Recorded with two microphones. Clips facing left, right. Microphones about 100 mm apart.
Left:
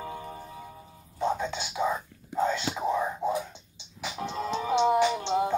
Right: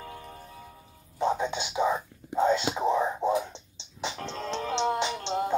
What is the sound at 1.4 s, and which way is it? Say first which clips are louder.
Whispering: right 2 dB; 20° right (ahead or behind).